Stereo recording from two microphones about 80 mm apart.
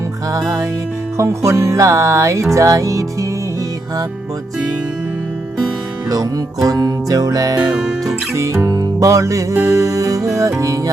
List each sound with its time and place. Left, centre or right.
0.3 s music: right
6.7 s music: right
7.8 s music: centre
8.4 s music: right